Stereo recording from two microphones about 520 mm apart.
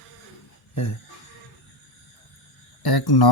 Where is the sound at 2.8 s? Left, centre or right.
Left.